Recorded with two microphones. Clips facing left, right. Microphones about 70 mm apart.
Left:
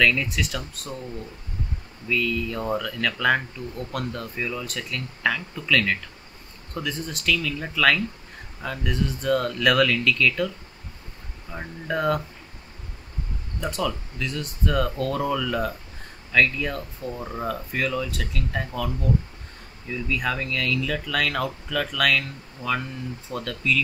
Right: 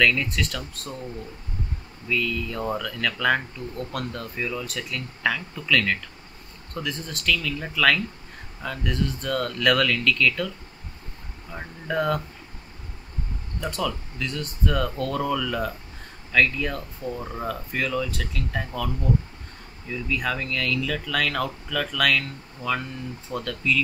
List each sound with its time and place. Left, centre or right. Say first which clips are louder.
0.0 s speech: even; centre
11.5 s speech: right 1 dB; centre
13.6 s speech: left 1 dB; centre
19.9 s speech: left 1 dB; centre